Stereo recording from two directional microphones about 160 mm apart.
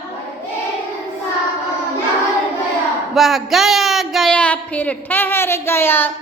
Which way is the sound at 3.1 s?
Centre (ahead or behind).